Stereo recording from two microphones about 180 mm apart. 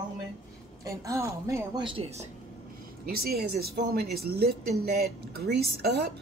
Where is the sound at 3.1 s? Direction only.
60° right (ahead or behind).